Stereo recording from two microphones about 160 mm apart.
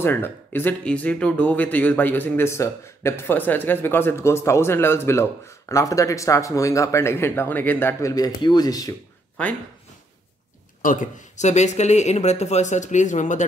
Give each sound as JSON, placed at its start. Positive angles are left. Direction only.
{"t": 0.0, "sound": "speech", "side_deg": 15}
{"t": 10.8, "sound": "speech", "side_deg": 55}